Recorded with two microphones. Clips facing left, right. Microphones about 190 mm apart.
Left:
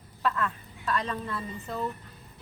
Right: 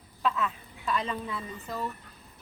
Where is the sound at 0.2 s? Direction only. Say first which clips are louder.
Even; 5° right (ahead or behind).